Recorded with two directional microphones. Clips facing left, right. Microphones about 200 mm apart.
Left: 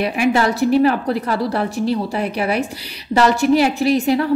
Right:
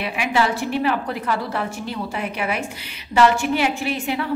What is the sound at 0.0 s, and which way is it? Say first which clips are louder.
A woman's voice: left 5 dB; 40° left (ahead or behind).